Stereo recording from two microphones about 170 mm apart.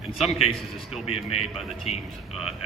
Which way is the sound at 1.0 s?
35° left (ahead or behind).